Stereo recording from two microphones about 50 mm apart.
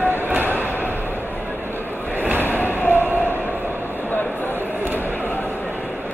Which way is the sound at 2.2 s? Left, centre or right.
Right.